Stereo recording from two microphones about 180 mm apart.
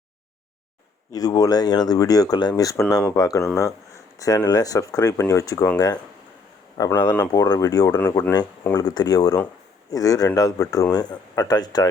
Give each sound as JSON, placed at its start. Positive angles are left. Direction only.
{"t": 1.1, "sound": "speech", "side_deg": 20}
{"t": 7.9, "sound": "speech", "side_deg": 10}